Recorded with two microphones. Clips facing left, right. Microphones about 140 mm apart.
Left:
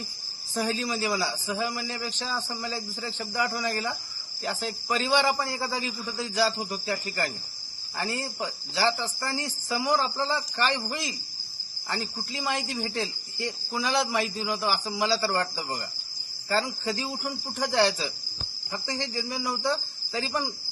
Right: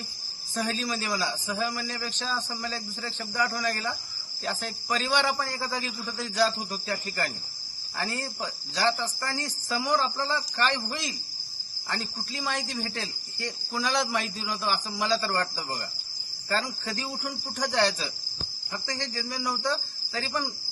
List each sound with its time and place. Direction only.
0.5 s a man's voice: 20° left (ahead or behind)